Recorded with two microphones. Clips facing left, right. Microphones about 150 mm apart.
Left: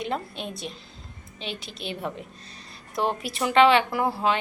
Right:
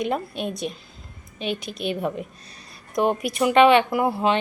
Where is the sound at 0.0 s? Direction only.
15° right (ahead or behind).